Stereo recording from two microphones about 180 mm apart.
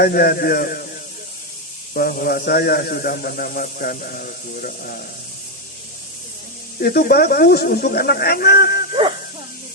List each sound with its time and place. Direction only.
0.0 s a man's voice: 55° left (ahead or behind)
1.9 s a man's voice: 55° left (ahead or behind)
6.7 s a man's voice: 55° left (ahead or behind)